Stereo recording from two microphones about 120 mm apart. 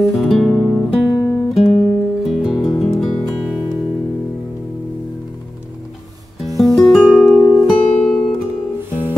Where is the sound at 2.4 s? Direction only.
Centre (ahead or behind).